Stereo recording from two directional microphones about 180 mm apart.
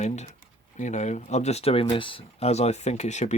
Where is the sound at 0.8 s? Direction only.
40° left (ahead or behind).